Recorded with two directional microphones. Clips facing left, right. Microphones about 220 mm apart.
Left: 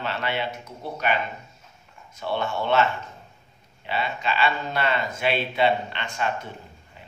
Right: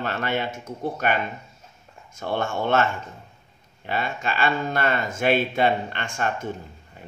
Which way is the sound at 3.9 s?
50° right (ahead or behind).